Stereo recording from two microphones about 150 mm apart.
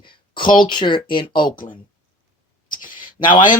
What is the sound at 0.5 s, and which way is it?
Speech, 30° left (ahead or behind).